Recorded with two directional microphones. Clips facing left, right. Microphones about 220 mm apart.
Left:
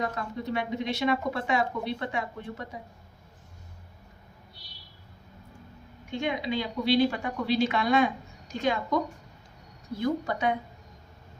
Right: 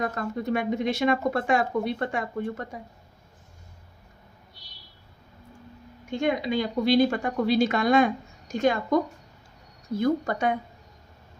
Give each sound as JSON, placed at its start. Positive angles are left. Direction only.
{"t": 0.0, "sound": "speech", "side_deg": -50}
{"t": 6.1, "sound": "speech", "side_deg": -45}
{"t": 10.0, "sound": "speech", "side_deg": -45}